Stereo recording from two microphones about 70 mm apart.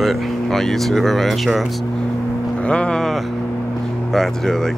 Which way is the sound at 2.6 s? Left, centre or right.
Centre.